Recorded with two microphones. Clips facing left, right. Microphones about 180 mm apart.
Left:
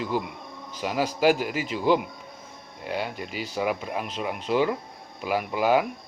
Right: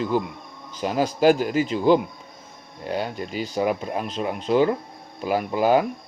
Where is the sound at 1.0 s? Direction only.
30° right (ahead or behind).